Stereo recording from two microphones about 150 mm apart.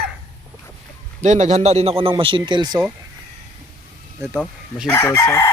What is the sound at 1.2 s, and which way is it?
A man's voice, 55° right (ahead or behind).